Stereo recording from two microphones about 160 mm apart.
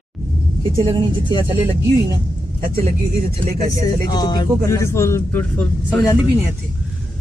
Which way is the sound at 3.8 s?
25° left (ahead or behind).